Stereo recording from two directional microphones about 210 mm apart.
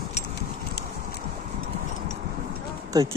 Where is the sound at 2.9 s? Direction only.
15° right (ahead or behind).